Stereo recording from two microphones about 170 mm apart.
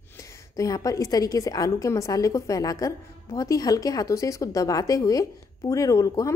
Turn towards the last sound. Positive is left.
turn(degrees=20)  # may be behind; listen again after turning